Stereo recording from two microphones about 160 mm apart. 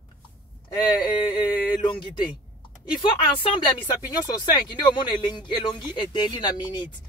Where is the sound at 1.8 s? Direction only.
30° left (ahead or behind).